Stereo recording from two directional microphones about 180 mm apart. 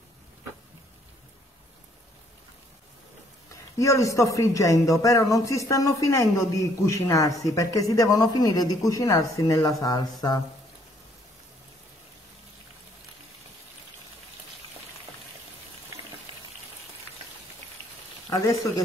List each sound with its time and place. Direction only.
3.7 s speech: 15° left (ahead or behind)
18.3 s speech: 20° left (ahead or behind)